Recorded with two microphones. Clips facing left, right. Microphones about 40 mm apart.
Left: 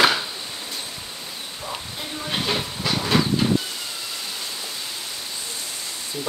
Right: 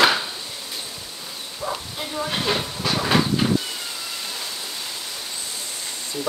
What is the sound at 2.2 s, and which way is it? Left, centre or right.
Speech, centre.